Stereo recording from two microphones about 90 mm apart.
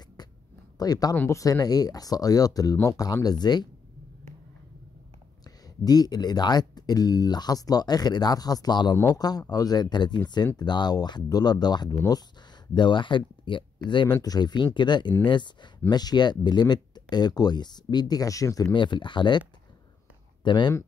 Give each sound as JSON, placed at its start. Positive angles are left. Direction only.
{"t": 0.7, "sound": "speech", "side_deg": 45}
{"t": 1.1, "sound": "speech", "side_deg": 30}
{"t": 1.4, "sound": "speech", "side_deg": 45}
{"t": 5.9, "sound": "speech", "side_deg": 45}
{"t": 18.7, "sound": "speech", "side_deg": 60}
{"t": 20.4, "sound": "speech", "side_deg": 60}